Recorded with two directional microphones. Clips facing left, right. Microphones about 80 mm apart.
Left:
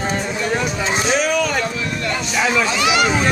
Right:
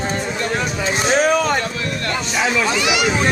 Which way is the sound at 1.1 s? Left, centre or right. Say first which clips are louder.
Right 4 dB; right.